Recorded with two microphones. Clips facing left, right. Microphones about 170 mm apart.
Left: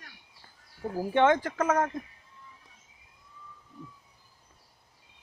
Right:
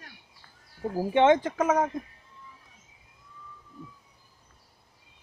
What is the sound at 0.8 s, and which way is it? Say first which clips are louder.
Speech: right 2 dB; 15° right (ahead or behind).